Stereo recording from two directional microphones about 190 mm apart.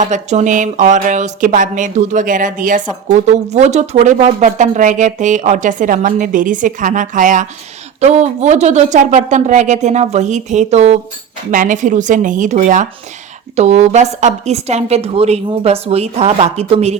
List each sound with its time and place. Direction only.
0.0 s speech: 40° right (ahead or behind)